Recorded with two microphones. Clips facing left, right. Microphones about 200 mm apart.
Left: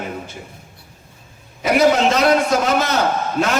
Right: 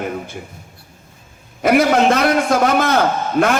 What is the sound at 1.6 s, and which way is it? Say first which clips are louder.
A man's voice: right 1 dB; 55° right (ahead or behind).